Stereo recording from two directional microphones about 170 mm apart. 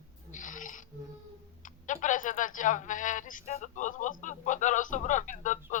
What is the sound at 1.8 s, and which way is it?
A man's voice, 50° left (ahead or behind).